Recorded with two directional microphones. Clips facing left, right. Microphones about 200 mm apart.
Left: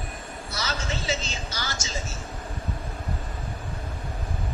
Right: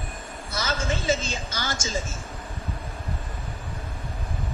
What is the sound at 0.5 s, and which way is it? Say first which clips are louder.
A woman's voice: right 4 dB; 50° right (ahead or behind).